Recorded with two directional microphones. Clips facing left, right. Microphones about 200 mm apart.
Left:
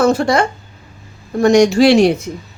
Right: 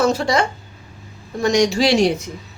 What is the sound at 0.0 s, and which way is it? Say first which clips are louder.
Speech: left 4 dB; 50° left (ahead or behind).